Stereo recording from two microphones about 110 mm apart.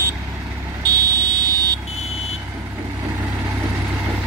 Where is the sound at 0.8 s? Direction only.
35° right (ahead or behind).